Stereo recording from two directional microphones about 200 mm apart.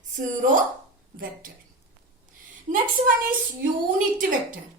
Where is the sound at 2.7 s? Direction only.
45° right (ahead or behind).